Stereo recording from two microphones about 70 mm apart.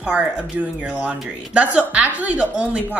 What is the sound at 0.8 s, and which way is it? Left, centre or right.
A woman's voice, centre.